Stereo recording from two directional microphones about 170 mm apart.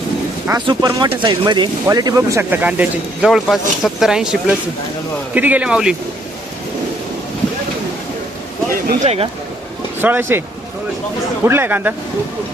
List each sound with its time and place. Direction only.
0.7 s speech: 20° right (ahead or behind); by 6.0 s 5° right (ahead or behind)
9.0 s speech: 35° right (ahead or behind)
10.0 s speech: 10° right (ahead or behind)
11.4 s speech: 10° right (ahead or behind)